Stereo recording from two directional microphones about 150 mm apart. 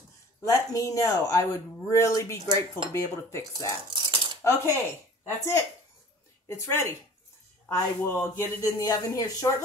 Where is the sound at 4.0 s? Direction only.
30° right (ahead or behind).